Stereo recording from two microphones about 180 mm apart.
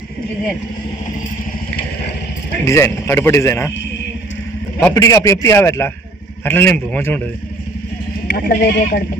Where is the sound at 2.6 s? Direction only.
15° left (ahead or behind).